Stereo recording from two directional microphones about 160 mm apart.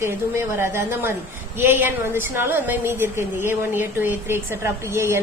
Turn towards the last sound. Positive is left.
turn(degrees=-15)  # may be behind; listen again after turning